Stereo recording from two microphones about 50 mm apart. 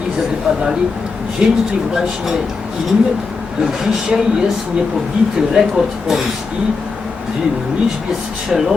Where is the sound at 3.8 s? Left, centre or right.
Centre.